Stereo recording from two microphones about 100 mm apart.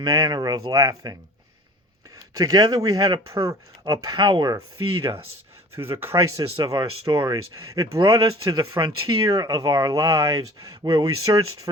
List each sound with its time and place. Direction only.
0.0 s speech: 40° right (ahead or behind)
2.1 s speech: 35° right (ahead or behind)
5.0 s speech: 25° right (ahead or behind); by 11.7 s 40° right (ahead or behind)